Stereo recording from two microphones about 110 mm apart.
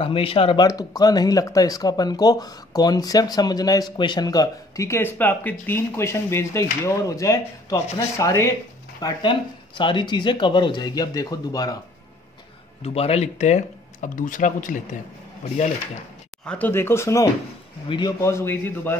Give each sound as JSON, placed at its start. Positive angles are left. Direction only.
{"t": 0.0, "sound": "speech", "side_deg": 55}
{"t": 0.6, "sound": "speech", "side_deg": 35}
{"t": 9.0, "sound": "speech", "side_deg": 45}
{"t": 12.8, "sound": "speech", "side_deg": 65}
{"t": 15.4, "sound": "speech", "side_deg": 90}
{"t": 16.4, "sound": "speech", "side_deg": 15}
{"t": 17.8, "sound": "speech", "side_deg": 45}
{"t": 18.2, "sound": "speech", "side_deg": 25}